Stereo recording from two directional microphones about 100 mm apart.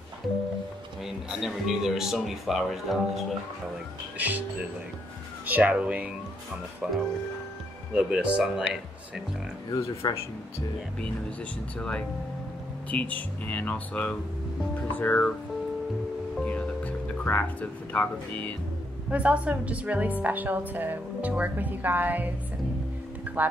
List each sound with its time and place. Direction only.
1.0 s speech: 5° right (ahead or behind)
4.2 s a woman's voice: 15° right (ahead or behind)
5.5 s a woman's voice: 15° right (ahead or behind)
9.7 s speech: 35° left (ahead or behind)
12.9 s speech: 15° left (ahead or behind)
16.4 s speech: 15° left (ahead or behind)
19.0 s a woman's voice: 15° right (ahead or behind)